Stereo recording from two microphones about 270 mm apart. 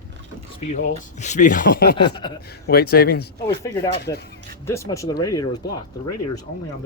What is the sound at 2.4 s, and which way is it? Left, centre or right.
A man's voice, left.